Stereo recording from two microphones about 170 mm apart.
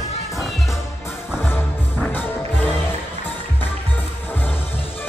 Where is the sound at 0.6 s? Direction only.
15° left (ahead or behind).